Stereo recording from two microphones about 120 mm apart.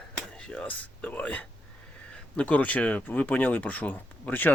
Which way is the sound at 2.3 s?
10° left (ahead or behind).